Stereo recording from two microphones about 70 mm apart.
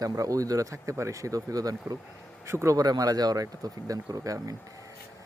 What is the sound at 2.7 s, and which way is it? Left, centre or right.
Speech, right.